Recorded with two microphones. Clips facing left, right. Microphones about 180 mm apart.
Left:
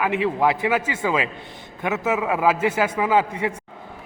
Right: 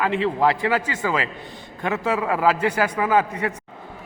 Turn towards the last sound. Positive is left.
turn(degrees=10)  # may be behind; listen again after turning